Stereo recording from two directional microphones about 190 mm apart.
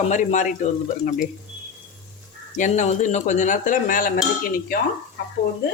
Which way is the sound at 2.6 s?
40° left (ahead or behind).